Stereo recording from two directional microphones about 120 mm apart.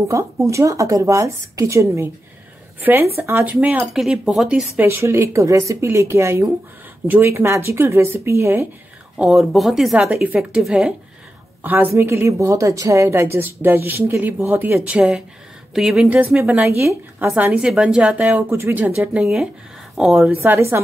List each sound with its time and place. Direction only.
0.1 s a woman's voice: 25° right (ahead or behind); by 4.6 s 5° right (ahead or behind)
4.7 s a woman's voice: 20° right (ahead or behind)
9.1 s a woman's voice: 5° right (ahead or behind)
16.5 s a woman's voice: 20° right (ahead or behind); by 20.2 s centre (ahead or behind)
20.2 s a woman's voice: 15° right (ahead or behind)